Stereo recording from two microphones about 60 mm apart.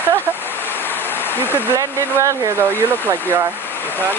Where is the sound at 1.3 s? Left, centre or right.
Left.